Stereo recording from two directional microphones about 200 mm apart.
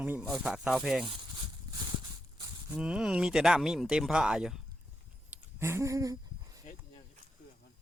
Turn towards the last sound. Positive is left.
turn(degrees=-15)  # may be behind; listen again after turning